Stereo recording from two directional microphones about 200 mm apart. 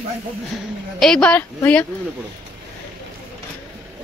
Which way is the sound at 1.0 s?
5° left (ahead or behind).